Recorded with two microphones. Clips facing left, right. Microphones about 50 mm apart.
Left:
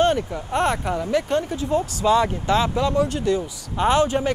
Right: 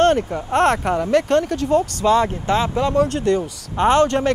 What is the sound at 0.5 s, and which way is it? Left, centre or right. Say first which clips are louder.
Speech: right 5 dB; right.